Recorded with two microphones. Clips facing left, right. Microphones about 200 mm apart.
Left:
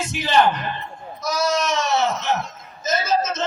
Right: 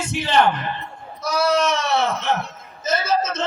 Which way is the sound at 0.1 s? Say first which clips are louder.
Right 1 dB; 30° right (ahead or behind).